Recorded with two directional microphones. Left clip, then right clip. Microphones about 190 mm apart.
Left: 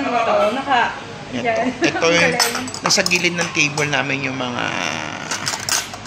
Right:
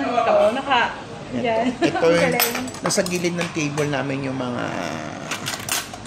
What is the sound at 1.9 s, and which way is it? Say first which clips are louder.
A man's voice: left 2 dB; 20° right (ahead or behind).